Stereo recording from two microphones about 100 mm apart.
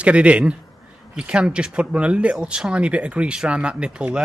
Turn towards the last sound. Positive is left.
turn(degrees=-10)  # may be behind; listen again after turning